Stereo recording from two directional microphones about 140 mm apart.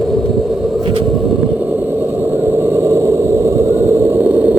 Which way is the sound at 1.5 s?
15° right (ahead or behind).